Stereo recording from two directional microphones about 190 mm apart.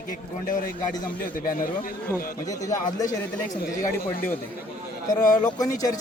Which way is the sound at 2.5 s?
15° left (ahead or behind).